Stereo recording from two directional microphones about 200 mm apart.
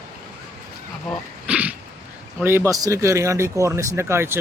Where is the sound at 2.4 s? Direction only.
10° right (ahead or behind).